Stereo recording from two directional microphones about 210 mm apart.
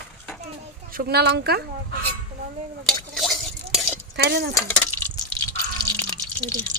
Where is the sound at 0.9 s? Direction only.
45° right (ahead or behind).